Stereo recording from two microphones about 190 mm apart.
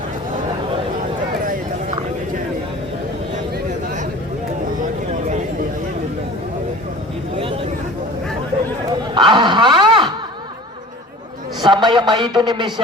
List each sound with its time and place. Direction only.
7.3 s a sound: 30° right (ahead or behind)
9.1 s dog: 25° right (ahead or behind)
11.6 s a man's voice: 25° right (ahead or behind)